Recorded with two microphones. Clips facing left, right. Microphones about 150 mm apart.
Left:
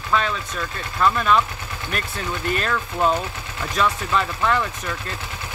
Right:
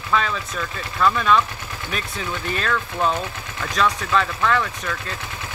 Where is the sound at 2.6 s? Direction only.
5° left (ahead or behind).